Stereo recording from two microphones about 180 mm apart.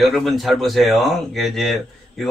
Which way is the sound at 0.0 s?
Centre (ahead or behind).